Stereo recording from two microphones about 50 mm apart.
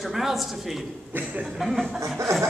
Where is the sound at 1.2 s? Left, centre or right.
Right.